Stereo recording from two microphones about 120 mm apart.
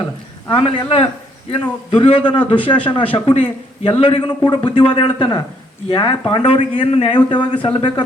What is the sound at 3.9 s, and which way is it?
A man's voice, 50° left (ahead or behind).